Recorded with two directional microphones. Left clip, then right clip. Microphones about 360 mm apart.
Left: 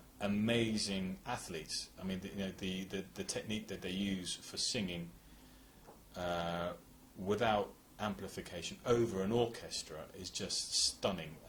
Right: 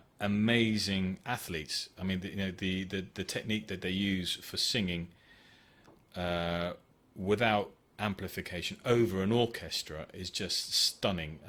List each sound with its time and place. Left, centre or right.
0.2 s speech: right
6.1 s speech: right